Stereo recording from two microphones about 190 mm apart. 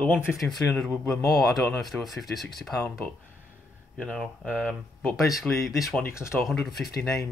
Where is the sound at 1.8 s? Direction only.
Centre (ahead or behind).